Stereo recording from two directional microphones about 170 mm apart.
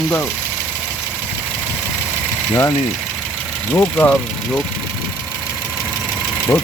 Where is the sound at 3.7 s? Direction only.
10° left (ahead or behind).